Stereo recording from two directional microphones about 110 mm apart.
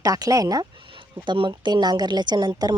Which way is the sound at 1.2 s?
45° right (ahead or behind).